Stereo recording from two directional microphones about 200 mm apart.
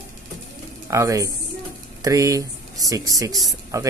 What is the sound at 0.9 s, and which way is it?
Speech, 15° right (ahead or behind).